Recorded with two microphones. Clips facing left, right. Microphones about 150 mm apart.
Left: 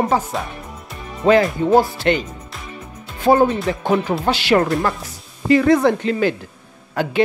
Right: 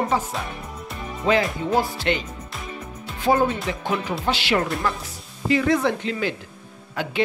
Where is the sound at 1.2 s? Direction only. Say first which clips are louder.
Left 7 dB; 50° left (ahead or behind).